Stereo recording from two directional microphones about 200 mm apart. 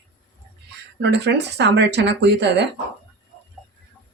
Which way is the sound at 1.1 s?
60° right (ahead or behind).